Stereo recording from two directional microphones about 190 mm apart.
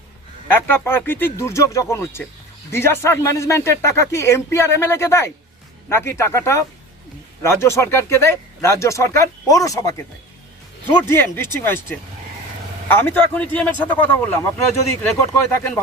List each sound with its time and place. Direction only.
0.5 s speech: 10° left (ahead or behind)
11.1 s speech: 10° left (ahead or behind)